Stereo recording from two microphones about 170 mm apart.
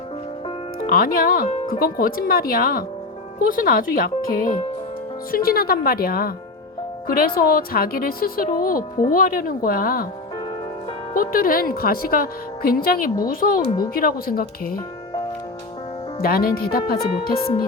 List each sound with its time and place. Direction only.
0.9 s speech: 55° left (ahead or behind)
7.3 s speech: 60° left (ahead or behind)
11.1 s speech: 55° left (ahead or behind)
13.7 s speech: 25° left (ahead or behind)
13.9 s speech: 60° left (ahead or behind)
16.2 s speech: 60° left (ahead or behind)